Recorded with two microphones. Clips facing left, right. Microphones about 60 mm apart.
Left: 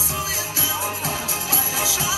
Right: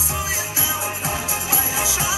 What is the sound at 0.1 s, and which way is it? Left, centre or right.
Music, right.